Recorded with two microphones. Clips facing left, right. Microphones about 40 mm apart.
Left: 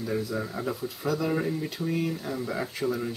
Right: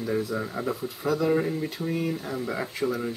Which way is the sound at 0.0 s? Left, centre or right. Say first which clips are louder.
Right 2 dB; centre.